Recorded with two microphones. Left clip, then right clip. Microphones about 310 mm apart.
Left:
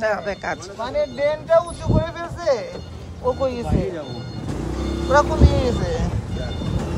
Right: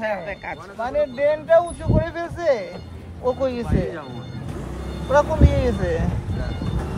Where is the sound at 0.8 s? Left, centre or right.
Centre.